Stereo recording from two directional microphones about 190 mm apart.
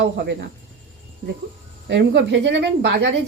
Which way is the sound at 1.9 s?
65° right (ahead or behind).